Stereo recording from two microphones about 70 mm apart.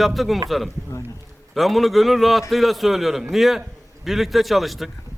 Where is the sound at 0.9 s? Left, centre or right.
Left.